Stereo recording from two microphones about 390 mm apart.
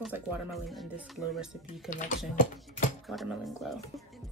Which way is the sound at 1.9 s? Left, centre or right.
Centre.